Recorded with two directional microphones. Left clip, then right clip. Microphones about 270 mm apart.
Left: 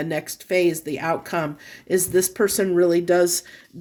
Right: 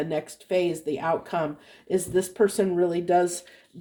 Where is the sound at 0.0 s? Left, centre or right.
Left.